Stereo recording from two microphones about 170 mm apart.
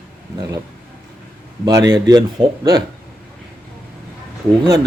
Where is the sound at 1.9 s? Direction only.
25° right (ahead or behind).